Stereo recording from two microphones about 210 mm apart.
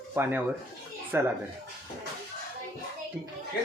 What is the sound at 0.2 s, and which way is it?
Speech, 10° right (ahead or behind).